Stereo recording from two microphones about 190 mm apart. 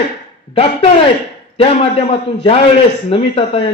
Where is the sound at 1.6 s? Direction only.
35° left (ahead or behind).